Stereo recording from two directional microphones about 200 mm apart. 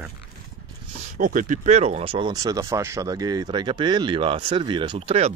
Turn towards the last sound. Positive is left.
turn(degrees=-30)  # may be behind; listen again after turning